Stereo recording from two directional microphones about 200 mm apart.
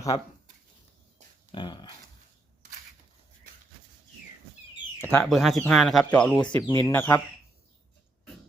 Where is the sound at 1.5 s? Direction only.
25° left (ahead or behind).